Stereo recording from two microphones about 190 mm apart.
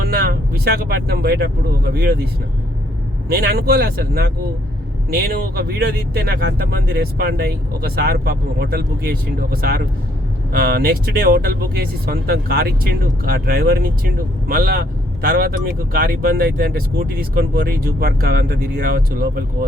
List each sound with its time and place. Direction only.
0.0 s speech: 50° right (ahead or behind)
3.2 s speech: 55° right (ahead or behind)